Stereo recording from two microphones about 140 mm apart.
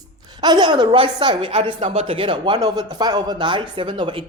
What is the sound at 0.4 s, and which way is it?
A woman's voice, 30° right (ahead or behind).